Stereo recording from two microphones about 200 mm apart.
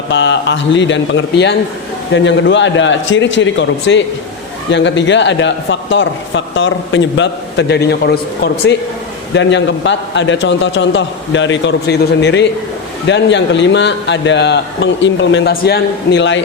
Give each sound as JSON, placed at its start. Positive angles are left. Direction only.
{"t": 0.1, "sound": "a man's voice", "side_deg": 65}
{"t": 9.3, "sound": "a man's voice", "side_deg": 60}